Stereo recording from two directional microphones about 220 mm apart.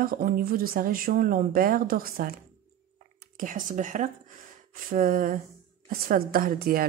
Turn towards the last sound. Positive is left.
turn(degrees=-40)  # may be behind; listen again after turning